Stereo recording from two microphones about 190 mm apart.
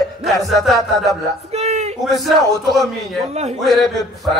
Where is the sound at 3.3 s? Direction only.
35° right (ahead or behind).